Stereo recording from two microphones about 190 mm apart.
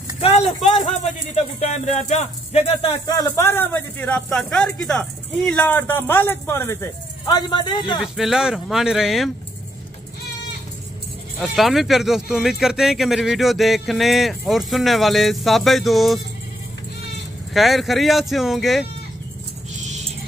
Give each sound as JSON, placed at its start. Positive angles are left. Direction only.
{"t": 0.2, "sound": "a sound", "side_deg": 35}
{"t": 1.3, "sound": "speech", "side_deg": 35}
{"t": 3.2, "sound": "speech", "side_deg": 15}
{"t": 8.0, "sound": "speech", "side_deg": 0}
{"t": 11.4, "sound": "speech", "side_deg": 0}
{"t": 17.6, "sound": "speech", "side_deg": 0}
{"t": 19.8, "sound": "music", "side_deg": -35}